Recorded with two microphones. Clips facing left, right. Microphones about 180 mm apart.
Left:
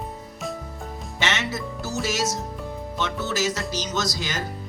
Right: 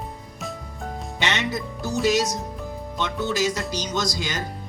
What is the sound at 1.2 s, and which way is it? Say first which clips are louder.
A man's voice: right 1 dB; 15° right (ahead or behind).